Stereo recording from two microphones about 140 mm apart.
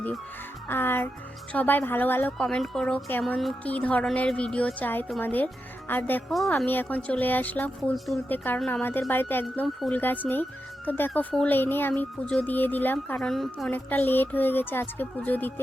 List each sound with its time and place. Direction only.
0.7 s a woman's voice: 15° left (ahead or behind)
6.2 s a woman's voice: centre (ahead or behind)
6.7 s a woman's voice: 10° left (ahead or behind)
7.9 s a woman's voice: centre (ahead or behind)
13.7 s a woman's voice: 15° left (ahead or behind)